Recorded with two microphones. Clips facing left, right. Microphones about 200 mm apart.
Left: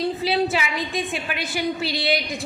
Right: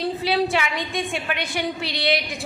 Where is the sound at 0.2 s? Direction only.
Centre (ahead or behind).